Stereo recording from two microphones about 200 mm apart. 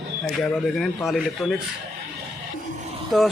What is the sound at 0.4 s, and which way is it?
A man's voice, centre (ahead or behind).